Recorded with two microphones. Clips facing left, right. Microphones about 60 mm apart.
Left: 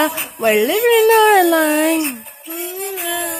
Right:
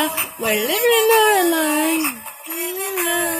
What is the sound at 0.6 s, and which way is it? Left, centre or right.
Speech, centre.